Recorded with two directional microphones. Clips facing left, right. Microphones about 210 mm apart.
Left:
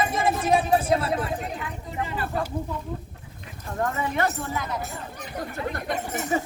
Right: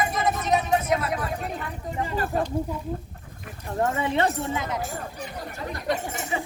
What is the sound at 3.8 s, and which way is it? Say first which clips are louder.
Speech: right 2 dB; 25° right (ahead or behind).